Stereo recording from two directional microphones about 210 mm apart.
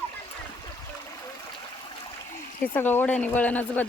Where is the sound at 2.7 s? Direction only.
10° left (ahead or behind).